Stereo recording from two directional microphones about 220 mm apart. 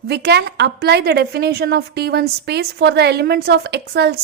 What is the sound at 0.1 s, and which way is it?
A woman's voice, 50° right (ahead or behind).